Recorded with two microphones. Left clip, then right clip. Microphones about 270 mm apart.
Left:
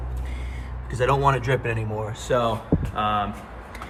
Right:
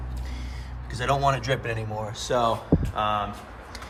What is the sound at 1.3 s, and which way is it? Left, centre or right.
Speech, centre.